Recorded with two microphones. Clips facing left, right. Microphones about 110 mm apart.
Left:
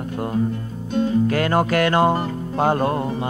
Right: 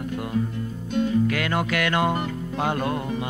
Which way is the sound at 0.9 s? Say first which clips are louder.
Left 3 dB; 35° left (ahead or behind).